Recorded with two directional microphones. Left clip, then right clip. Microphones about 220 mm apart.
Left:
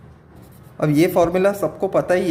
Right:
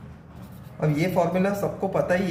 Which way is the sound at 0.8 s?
50° left (ahead or behind).